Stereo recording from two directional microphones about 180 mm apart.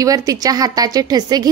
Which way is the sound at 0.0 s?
20° right (ahead or behind).